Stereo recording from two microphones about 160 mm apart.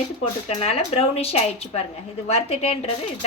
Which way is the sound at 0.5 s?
40° left (ahead or behind).